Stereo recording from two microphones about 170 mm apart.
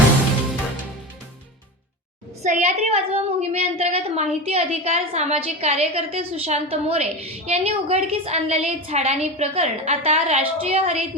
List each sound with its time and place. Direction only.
2.4 s a woman's voice: 45° right (ahead or behind)